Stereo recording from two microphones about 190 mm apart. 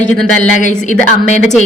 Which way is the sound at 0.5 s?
40° left (ahead or behind).